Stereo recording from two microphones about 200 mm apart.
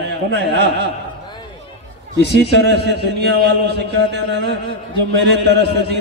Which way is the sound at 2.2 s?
55° left (ahead or behind).